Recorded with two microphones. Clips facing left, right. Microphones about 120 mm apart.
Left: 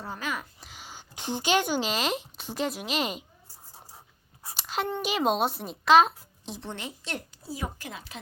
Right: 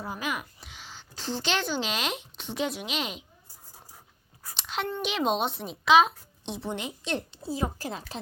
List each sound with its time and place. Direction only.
0.0 s speech: 15° right (ahead or behind)
0.6 s speech: 5° left (ahead or behind)
3.5 s writing: 30° left (ahead or behind)
4.5 s a sound: 5° left (ahead or behind)
5.0 s a woman's voice: 5° left (ahead or behind)
6.7 s a woman's voice: 20° right (ahead or behind); by 8.2 s 35° right (ahead or behind)